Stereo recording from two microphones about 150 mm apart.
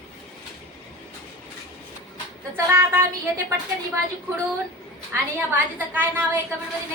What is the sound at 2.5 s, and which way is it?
Speech, 15° right (ahead or behind).